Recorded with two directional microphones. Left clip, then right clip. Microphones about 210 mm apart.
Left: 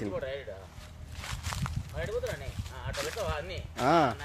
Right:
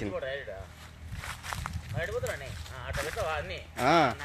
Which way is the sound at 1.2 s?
45° right (ahead or behind).